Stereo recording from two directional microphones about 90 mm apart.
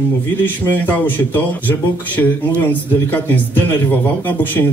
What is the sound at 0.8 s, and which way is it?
Speech, 20° left (ahead or behind).